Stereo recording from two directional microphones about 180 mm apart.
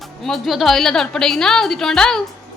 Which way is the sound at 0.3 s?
Centre (ahead or behind).